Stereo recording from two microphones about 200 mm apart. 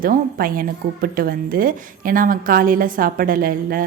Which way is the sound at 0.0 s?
45° right (ahead or behind).